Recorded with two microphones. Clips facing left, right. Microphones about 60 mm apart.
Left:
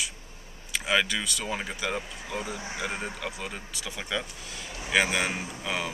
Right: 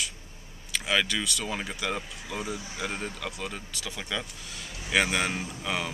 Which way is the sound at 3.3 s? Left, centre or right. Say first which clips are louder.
Even; centre.